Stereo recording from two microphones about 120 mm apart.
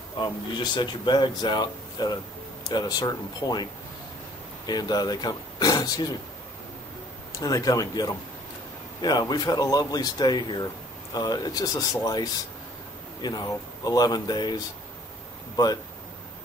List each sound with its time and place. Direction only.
0.2 s speech: 40° left (ahead or behind)
4.6 s speech: 35° left (ahead or behind)
7.3 s speech: 30° left (ahead or behind)